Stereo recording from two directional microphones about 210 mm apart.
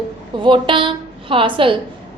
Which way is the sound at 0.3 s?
25° right (ahead or behind).